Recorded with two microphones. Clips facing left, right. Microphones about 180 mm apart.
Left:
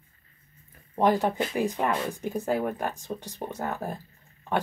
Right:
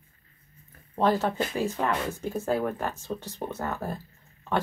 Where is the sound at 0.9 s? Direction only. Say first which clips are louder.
Left 1 dB; 15° left (ahead or behind).